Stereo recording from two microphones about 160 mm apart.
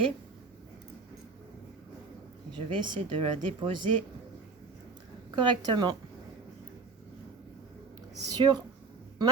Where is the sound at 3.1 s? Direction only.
35° right (ahead or behind).